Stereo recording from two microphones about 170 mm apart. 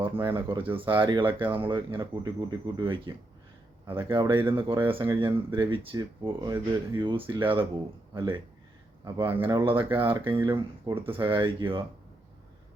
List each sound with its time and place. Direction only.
0.0 s speech: 30° right (ahead or behind)